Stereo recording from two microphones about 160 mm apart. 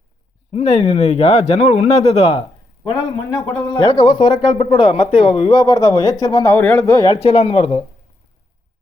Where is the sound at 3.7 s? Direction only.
30° left (ahead or behind).